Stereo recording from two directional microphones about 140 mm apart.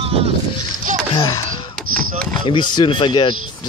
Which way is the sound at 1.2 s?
25° left (ahead or behind).